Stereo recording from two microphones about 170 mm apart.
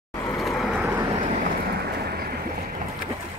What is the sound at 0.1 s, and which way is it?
Vehicle, 20° left (ahead or behind).